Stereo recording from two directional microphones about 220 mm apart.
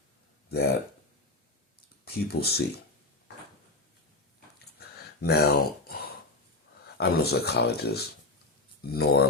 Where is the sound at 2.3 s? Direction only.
45° left (ahead or behind).